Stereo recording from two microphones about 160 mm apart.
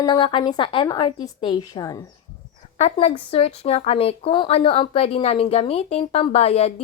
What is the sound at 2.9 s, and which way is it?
Speech, 35° left (ahead or behind).